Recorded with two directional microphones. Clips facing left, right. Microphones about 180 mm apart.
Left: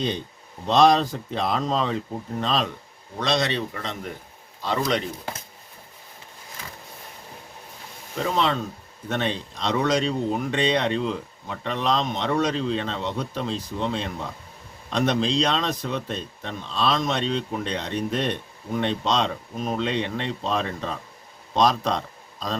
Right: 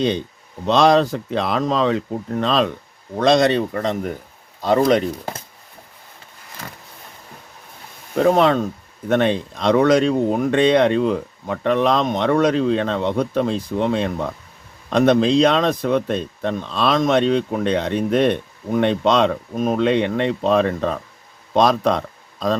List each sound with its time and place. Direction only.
0.7 s speech: 85° right
2.4 s speech: 65° right (ahead or behind)
3.2 s speech: 50° right (ahead or behind)
8.1 s speech: 55° right (ahead or behind)